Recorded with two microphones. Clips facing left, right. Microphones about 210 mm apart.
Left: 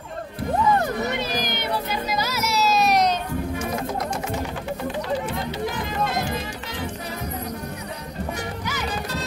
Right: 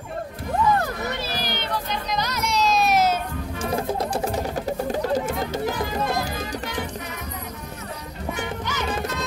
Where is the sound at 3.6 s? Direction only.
30° right (ahead or behind).